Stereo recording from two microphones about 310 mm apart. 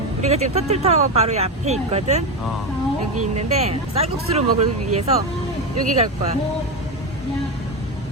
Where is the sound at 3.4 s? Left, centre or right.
Centre.